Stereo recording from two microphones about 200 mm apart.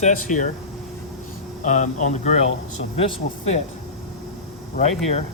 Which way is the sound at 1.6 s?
35° left (ahead or behind).